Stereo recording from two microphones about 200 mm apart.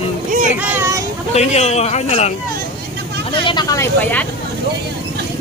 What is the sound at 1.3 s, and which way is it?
Speech, 35° left (ahead or behind).